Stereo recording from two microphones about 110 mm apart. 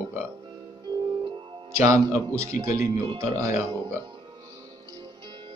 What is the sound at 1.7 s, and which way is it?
Speech, 25° right (ahead or behind).